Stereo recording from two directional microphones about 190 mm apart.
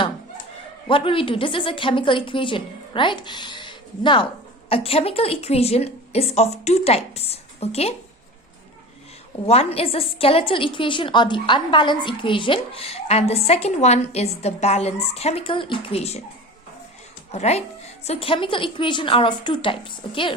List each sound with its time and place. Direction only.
0.9 s a woman's voice: 30° left (ahead or behind)
9.5 s a woman's voice: 30° left (ahead or behind)
17.3 s a woman's voice: 35° left (ahead or behind)